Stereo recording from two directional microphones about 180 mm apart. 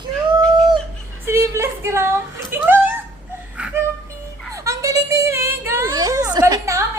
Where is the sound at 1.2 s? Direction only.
15° right (ahead or behind).